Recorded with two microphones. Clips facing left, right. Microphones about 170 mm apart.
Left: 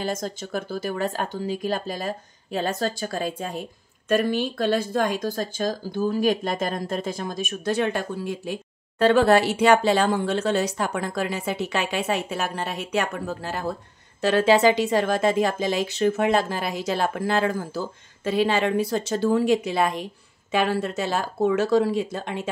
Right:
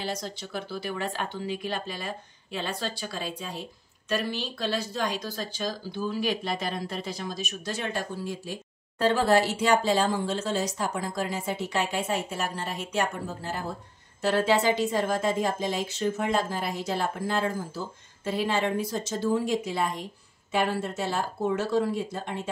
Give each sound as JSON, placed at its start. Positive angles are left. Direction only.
{"t": 0.0, "sound": "speech", "side_deg": 45}
{"t": 14.2, "sound": "a woman's voice", "side_deg": 90}
{"t": 20.5, "sound": "speech", "side_deg": 90}